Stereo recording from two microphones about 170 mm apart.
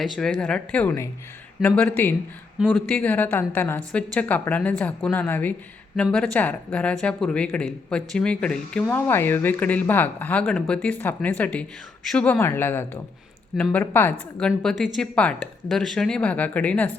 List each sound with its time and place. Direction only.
0.0 s speech: 5° left (ahead or behind)